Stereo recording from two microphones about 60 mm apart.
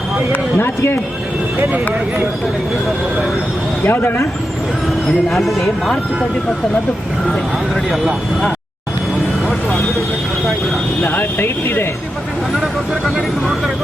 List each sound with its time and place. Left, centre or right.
3.8 s speech: left
5.3 s speech: centre
11.0 s speech: left
12.5 s speech: centre